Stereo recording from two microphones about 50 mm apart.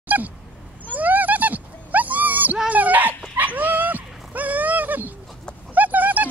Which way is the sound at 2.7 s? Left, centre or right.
Right.